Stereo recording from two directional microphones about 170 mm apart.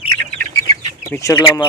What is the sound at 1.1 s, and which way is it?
Speech, 15° left (ahead or behind).